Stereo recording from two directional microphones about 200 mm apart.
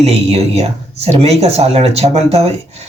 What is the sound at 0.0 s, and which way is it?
Speech, 30° right (ahead or behind).